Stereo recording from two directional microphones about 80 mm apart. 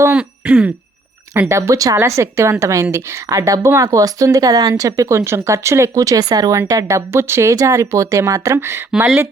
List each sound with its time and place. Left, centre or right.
0.1 s throat clearing: centre
1.4 s speech: right
6.5 s speech: right
8.9 s speech: centre